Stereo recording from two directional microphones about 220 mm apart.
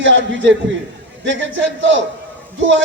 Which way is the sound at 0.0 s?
55° right (ahead or behind).